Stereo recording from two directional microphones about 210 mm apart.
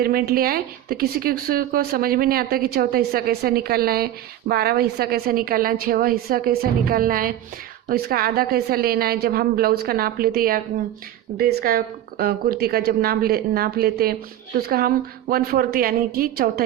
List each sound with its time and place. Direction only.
0.0 s speech: 45° right (ahead or behind)